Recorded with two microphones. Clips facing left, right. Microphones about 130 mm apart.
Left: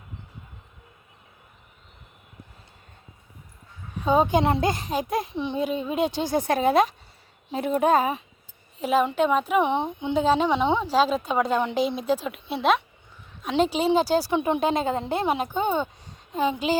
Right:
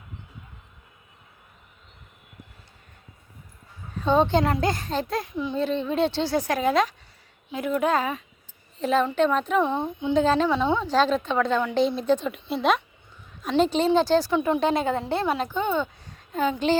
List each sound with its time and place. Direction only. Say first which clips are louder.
3.9 s a woman's voice: even; 10° left (ahead or behind); by 5.5 s 25° left (ahead or behind)
5.5 s a woman's voice: right 1 dB; 10° left (ahead or behind)
8.8 s a woman's voice: even; 10° left (ahead or behind)
9.6 s a child's voice: even; 20° left (ahead or behind)
10.2 s a woman's voice: even; 10° left (ahead or behind)
10.8 s a woman's voice: even; 5° left (ahead or behind)
13.6 s a woman's voice: right 1 dB; 5° left (ahead or behind); by 16.6 s 25° left (ahead or behind)